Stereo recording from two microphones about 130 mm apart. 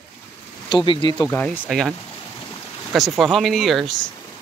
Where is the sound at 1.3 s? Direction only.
10° left (ahead or behind).